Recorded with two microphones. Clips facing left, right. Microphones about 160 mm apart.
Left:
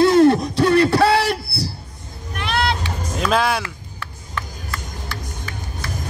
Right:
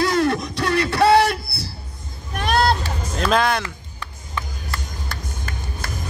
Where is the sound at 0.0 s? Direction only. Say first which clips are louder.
Left 7 dB; 25° left (ahead or behind).